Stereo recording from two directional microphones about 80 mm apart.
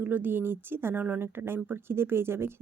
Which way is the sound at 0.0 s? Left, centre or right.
Right.